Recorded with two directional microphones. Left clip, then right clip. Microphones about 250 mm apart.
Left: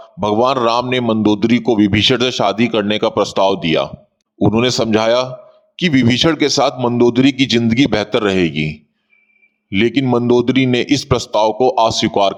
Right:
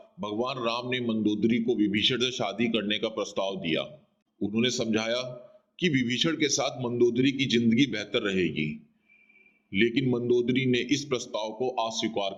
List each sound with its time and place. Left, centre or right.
0.2 s speech: left